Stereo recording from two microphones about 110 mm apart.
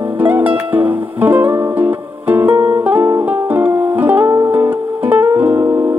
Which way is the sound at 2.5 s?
50° right (ahead or behind).